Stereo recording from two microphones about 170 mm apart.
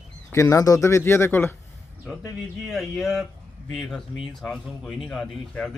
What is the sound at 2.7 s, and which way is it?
Speech, centre (ahead or behind).